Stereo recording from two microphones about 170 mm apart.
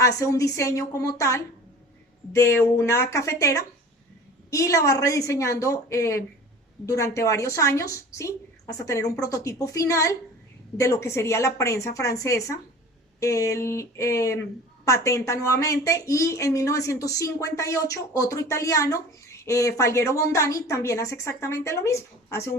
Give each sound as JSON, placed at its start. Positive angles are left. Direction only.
{"t": 0.0, "sound": "a woman's voice", "side_deg": 20}